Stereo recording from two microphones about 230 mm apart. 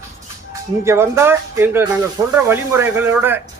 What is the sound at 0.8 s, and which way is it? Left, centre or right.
Speech, centre.